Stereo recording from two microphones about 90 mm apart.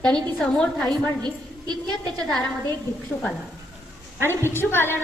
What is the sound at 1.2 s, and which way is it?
Speech, 50° right (ahead or behind).